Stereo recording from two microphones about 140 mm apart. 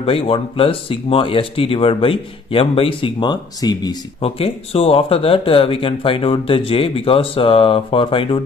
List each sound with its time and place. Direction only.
0.0 s speech: 40° left (ahead or behind)
4.2 s speech: 45° left (ahead or behind)